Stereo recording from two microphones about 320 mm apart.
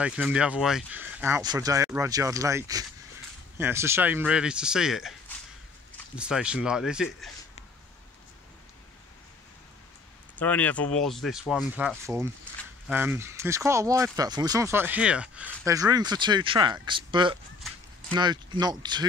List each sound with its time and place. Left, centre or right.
0.0 s speech: centre
6.1 s speech: centre
10.4 s speech: centre